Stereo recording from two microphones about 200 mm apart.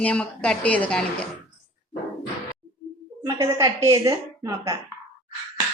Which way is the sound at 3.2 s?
15° right (ahead or behind).